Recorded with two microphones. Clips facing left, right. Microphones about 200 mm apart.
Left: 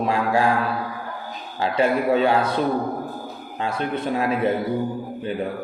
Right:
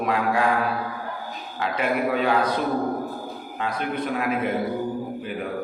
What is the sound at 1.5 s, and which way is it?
Speech, 30° left (ahead or behind).